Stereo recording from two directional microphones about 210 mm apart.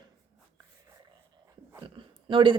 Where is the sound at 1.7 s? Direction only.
25° right (ahead or behind).